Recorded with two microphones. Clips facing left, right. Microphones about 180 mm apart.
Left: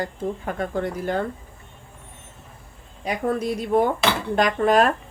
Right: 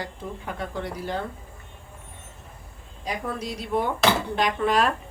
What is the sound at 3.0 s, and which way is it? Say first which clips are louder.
Speech: left 7 dB; 55° left (ahead or behind).